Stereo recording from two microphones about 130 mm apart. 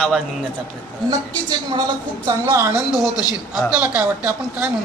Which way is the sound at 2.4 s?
20° right (ahead or behind).